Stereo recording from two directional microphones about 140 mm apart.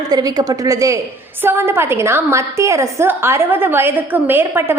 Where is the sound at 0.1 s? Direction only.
25° right (ahead or behind).